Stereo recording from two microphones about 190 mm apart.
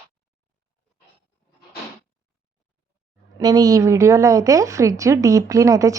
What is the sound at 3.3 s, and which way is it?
A woman's voice, 20° right (ahead or behind).